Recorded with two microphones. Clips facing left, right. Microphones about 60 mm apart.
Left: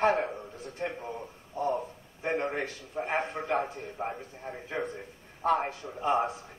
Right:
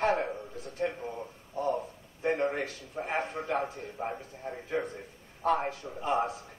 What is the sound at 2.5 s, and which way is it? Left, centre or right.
A man's voice, left.